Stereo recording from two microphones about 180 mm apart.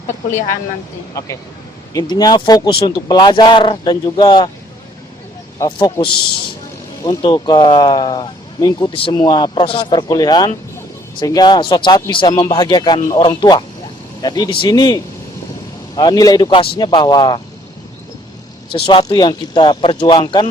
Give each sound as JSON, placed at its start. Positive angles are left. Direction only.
{"t": 1.2, "sound": "speech", "side_deg": 20}
{"t": 5.5, "sound": "speech", "side_deg": 20}
{"t": 7.0, "sound": "speech", "side_deg": 25}
{"t": 18.9, "sound": "speech", "side_deg": 25}